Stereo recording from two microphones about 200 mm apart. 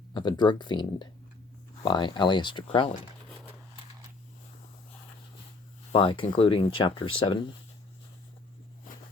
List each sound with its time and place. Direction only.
0.1 s speech: 20° left (ahead or behind)
5.9 s speech: 25° left (ahead or behind)